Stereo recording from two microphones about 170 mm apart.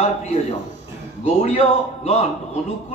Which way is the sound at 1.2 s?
35° left (ahead or behind).